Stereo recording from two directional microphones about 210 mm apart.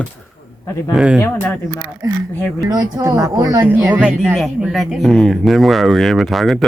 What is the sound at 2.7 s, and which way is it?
Speech, 15° right (ahead or behind).